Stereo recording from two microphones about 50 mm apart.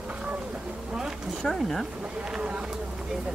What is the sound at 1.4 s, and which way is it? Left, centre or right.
Speech, centre.